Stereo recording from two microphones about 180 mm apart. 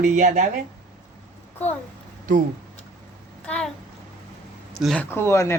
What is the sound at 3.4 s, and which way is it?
Speech, 5° left (ahead or behind).